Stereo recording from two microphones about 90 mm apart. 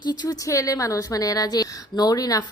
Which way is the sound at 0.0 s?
50° left (ahead or behind).